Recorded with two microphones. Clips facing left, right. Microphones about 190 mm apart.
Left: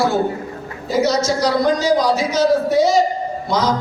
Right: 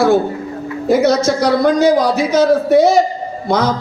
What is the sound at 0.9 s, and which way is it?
A man's voice, 55° right (ahead or behind).